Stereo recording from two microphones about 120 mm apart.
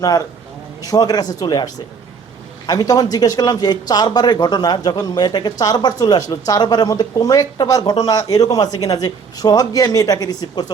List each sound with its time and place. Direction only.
0.8 s speech: 30° left (ahead or behind)